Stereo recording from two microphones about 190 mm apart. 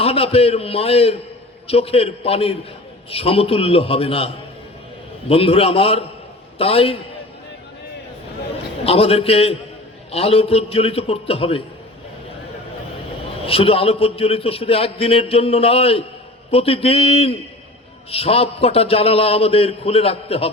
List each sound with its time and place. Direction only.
0.0 s a man's voice: 30° left (ahead or behind)
5.3 s a man's voice: 30° left (ahead or behind)
8.8 s a man's voice: 30° left (ahead or behind)
13.4 s a man's voice: 30° left (ahead or behind)